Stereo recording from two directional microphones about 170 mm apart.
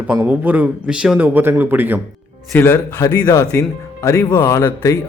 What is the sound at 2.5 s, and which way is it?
Speech, 15° left (ahead or behind).